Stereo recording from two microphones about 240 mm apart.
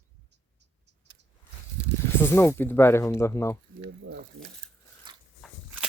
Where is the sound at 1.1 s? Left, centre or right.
Centre.